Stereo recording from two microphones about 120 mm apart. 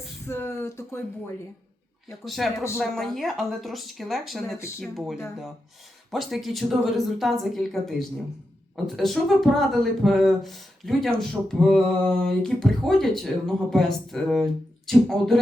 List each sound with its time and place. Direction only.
0.3 s speech: 20° left (ahead or behind)
2.2 s speech: centre (ahead or behind)